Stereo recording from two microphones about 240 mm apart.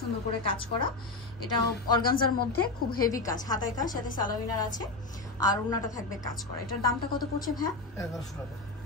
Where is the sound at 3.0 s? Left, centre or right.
Centre.